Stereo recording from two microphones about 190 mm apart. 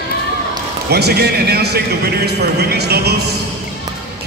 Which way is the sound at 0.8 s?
60° right (ahead or behind).